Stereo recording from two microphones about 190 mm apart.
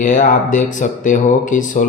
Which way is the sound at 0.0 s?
40° left (ahead or behind).